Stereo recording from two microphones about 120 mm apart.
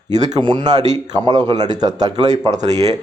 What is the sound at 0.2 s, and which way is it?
Speech, 35° right (ahead or behind).